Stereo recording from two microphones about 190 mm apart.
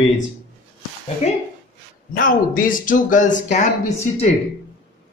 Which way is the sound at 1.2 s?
35° left (ahead or behind).